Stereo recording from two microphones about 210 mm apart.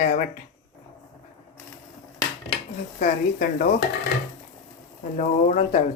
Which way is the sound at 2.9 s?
45° left (ahead or behind).